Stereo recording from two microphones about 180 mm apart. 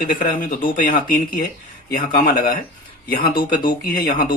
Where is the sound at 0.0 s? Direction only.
50° left (ahead or behind).